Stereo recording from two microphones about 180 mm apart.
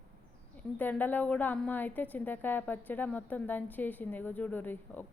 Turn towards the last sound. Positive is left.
turn(degrees=10)  # may be behind; listen again after turning